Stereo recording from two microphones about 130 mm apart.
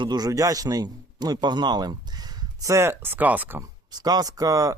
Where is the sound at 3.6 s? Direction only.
30° right (ahead or behind).